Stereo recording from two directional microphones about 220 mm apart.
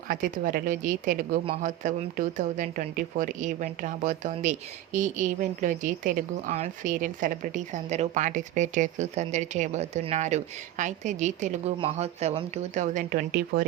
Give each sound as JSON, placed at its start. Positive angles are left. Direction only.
{"t": 0.1, "sound": "speech", "side_deg": -40}